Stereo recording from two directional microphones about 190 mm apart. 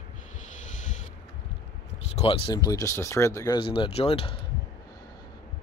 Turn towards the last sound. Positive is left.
turn(degrees=30)  # may be behind; listen again after turning